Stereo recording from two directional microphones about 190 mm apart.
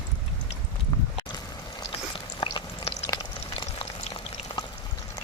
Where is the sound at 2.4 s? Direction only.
25° left (ahead or behind).